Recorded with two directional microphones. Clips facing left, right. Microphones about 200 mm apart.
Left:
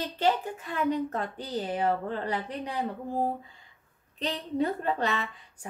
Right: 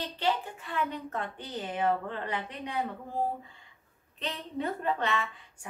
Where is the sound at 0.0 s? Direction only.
45° left (ahead or behind).